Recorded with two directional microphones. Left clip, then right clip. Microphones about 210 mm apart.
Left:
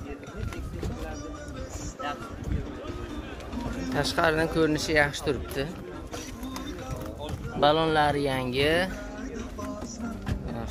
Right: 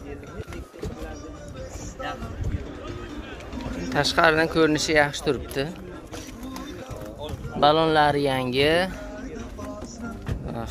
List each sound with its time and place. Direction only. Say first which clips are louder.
3.9 s speech: right 6 dB; 15° right (ahead or behind)
7.6 s speech: right 4 dB; 20° right (ahead or behind)